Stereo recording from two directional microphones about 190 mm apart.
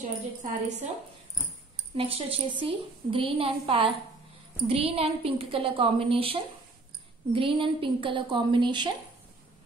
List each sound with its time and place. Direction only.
0.4 s speech: 40° right (ahead or behind)
2.0 s a woman's voice: 30° right (ahead or behind)